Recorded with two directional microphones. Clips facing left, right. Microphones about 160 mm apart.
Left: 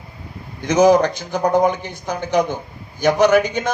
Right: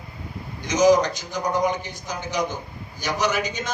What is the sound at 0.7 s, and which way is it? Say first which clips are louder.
A man's voice: left 4 dB; 55° left (ahead or behind).